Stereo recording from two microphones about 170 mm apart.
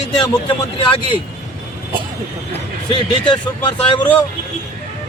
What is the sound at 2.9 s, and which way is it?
Speech, 30° left (ahead or behind).